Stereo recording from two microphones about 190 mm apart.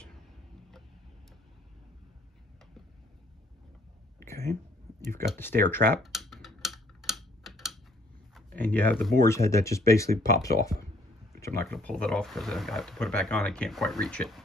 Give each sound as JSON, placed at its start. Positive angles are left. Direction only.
{"t": 4.2, "sound": "a sound", "side_deg": 15}
{"t": 5.3, "sound": "speech", "side_deg": 10}
{"t": 5.9, "sound": "tick-tock", "side_deg": 0}
{"t": 8.4, "sound": "a sound", "side_deg": 10}
{"t": 9.2, "sound": "speech", "side_deg": 15}
{"t": 11.7, "sound": "speech", "side_deg": 5}